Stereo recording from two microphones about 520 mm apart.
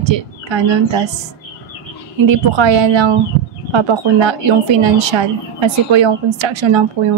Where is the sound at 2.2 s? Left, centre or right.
Right.